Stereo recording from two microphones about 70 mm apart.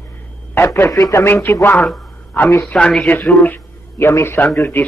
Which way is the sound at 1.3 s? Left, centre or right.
Left.